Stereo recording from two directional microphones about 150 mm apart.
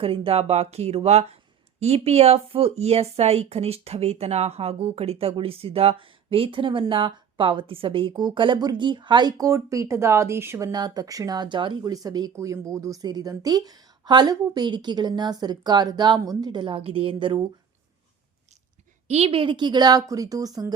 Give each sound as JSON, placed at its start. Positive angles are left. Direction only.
{"t": 0.0, "sound": "a woman's voice", "side_deg": -35}
{"t": 19.0, "sound": "a woman's voice", "side_deg": -45}